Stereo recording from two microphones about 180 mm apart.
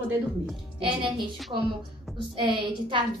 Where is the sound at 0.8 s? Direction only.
30° right (ahead or behind).